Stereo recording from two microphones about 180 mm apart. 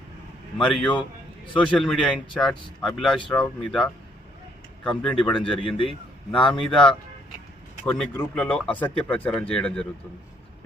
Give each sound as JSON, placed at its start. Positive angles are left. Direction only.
{"t": 0.6, "sound": "speech", "side_deg": 5}
{"t": 5.6, "sound": "a man's voice", "side_deg": 30}
{"t": 6.5, "sound": "speech", "side_deg": 5}